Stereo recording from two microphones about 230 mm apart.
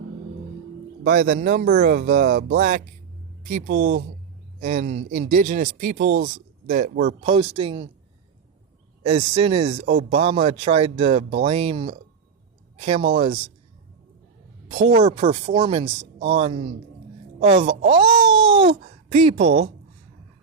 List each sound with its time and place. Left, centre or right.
1.0 s speech: right
7.2 s speech: right
9.0 s speech: right
14.7 s speech: right